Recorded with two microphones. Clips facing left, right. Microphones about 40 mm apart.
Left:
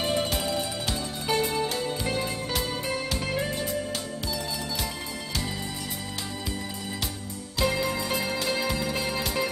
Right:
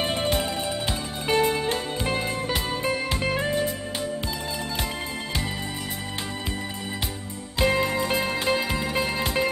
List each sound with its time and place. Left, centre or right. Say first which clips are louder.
0.0 s music: right 2 dB; right
7.5 s music: right 4 dB; right